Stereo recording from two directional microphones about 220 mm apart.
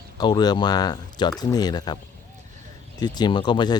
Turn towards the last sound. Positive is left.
turn(degrees=20)  # may be behind; listen again after turning